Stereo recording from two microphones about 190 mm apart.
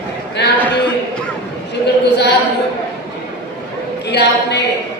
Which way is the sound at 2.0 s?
60° left (ahead or behind).